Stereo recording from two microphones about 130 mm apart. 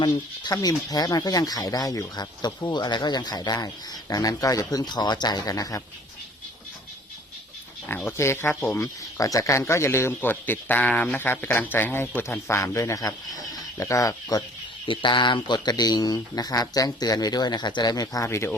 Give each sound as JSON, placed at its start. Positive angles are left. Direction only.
{"t": 0.0, "sound": "speech", "side_deg": 30}
{"t": 7.9, "sound": "speech", "side_deg": 15}
{"t": 14.8, "sound": "speech", "side_deg": 40}